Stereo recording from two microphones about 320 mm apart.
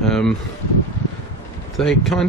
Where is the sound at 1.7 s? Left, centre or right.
Centre.